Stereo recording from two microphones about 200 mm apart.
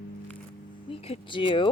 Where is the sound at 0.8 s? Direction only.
30° left (ahead or behind).